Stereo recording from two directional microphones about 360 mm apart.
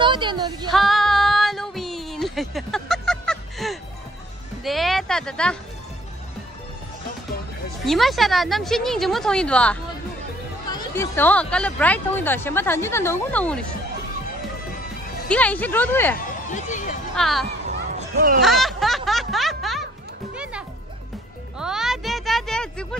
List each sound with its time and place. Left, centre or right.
0.0 s speech: centre
0.7 s female singing: centre
4.6 s a sound: centre
7.8 s speech: centre
15.2 s speech: centre
16.3 s a sound: left
17.1 s speech: centre
17.5 s a sound: right
18.4 s music: centre
21.5 s music: centre